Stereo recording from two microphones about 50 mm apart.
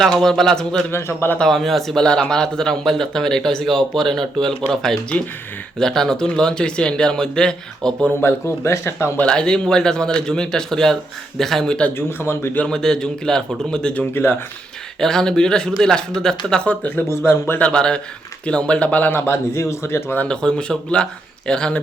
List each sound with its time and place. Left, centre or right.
0.1 s speech: centre
0.9 s speech: left
1.5 s speech: centre
2.0 s speech: centre
8.6 s speech: left
9.2 s speech: centre
11.9 s speech: left
12.6 s speech: centre
14.1 s speech: left
15.0 s speech: centre
17.1 s speech: left
17.7 s speech: centre
19.1 s speech: left
20.2 s speech: centre